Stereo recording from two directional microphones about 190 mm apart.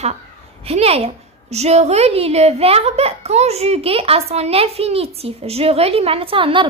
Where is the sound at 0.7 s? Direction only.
30° right (ahead or behind).